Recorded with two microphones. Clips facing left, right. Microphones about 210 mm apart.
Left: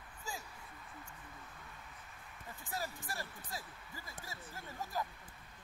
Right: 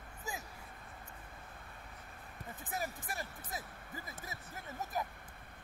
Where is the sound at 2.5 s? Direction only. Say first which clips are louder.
Right 2 dB; 20° right (ahead or behind).